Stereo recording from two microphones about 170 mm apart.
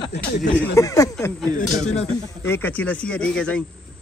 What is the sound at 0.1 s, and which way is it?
Speech, 70° left (ahead or behind).